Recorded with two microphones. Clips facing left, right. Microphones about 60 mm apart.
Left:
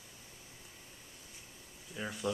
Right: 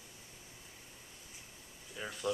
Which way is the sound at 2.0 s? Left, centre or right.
Centre.